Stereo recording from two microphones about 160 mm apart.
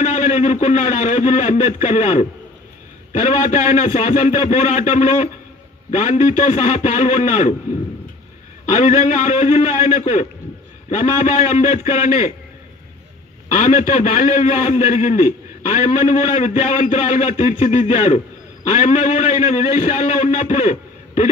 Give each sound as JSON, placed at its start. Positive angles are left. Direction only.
{"t": 0.0, "sound": "a man's voice", "side_deg": 50}
{"t": 8.6, "sound": "a man's voice", "side_deg": 50}
{"t": 13.5, "sound": "a man's voice", "side_deg": 50}